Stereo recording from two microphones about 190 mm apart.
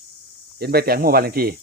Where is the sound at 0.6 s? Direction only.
55° right (ahead or behind).